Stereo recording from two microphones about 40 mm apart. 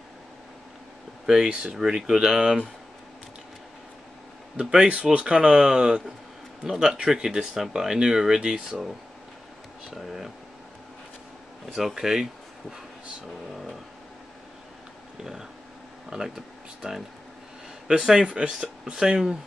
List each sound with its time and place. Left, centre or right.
1.2 s speech: centre
1.5 s speech: right
1.8 s speech: centre
4.6 s speech: right
9.8 s speech: centre
11.7 s speech: centre
16.3 s speech: centre
17.8 s speech: centre